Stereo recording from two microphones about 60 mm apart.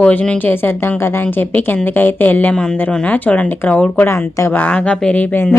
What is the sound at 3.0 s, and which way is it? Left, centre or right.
Speech, left.